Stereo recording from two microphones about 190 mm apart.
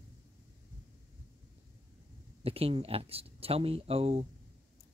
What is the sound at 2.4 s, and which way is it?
Speech, 30° right (ahead or behind).